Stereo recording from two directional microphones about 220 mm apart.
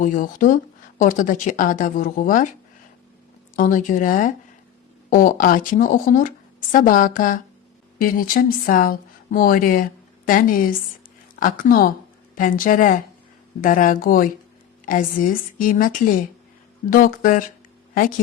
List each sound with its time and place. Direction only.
0.0 s speech: 35° left (ahead or behind)
3.5 s speech: 35° left (ahead or behind)